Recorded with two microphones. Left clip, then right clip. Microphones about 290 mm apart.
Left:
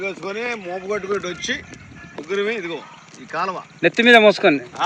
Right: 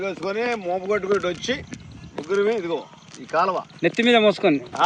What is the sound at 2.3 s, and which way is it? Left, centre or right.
Speech, right.